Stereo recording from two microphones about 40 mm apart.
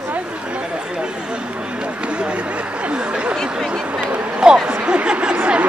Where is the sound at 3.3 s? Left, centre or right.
Centre.